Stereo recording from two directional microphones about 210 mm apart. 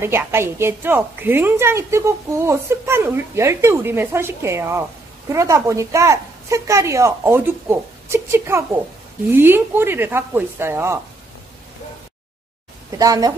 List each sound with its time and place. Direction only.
0.0 s a woman's voice: 10° right (ahead or behind)
13.0 s a woman's voice: 15° right (ahead or behind)